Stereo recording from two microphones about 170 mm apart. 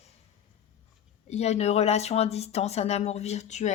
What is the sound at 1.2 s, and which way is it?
Speech, 40° left (ahead or behind).